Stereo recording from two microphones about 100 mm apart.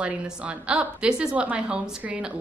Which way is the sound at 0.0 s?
15° right (ahead or behind).